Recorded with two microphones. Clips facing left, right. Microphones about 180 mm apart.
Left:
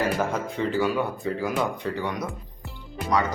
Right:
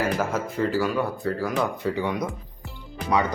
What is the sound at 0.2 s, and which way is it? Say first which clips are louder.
Speech: right 1 dB; 5° right (ahead or behind).